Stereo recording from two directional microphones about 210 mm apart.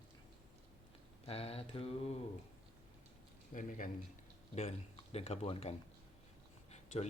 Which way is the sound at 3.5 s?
40° left (ahead or behind).